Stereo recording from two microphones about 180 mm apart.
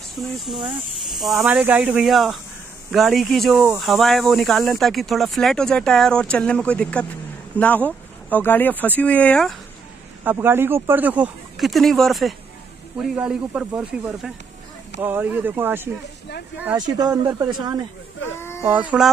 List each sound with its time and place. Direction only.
0.5 s speech: 5° right (ahead or behind)
10.2 s speech: 10° right (ahead or behind)
16.7 s speech: 20° right (ahead or behind)
18.3 s a sound: 15° left (ahead or behind)
18.6 s speech: 10° right (ahead or behind)